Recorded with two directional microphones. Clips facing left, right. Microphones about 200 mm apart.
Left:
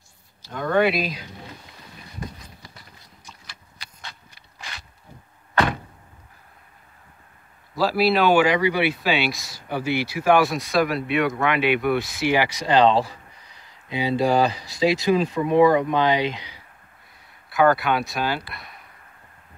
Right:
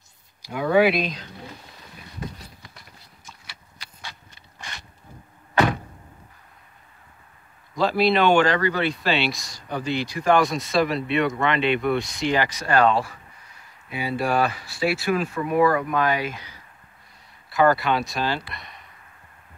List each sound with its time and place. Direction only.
0.4 s speech: 10° right (ahead or behind); by 1.3 s 5° left (ahead or behind)
5.5 s a sound: 10° right (ahead or behind)
7.7 s speech: 5° left (ahead or behind); by 13.0 s 20° left (ahead or behind)
14.2 s speech: 20° left (ahead or behind)
17.5 s speech: centre (ahead or behind)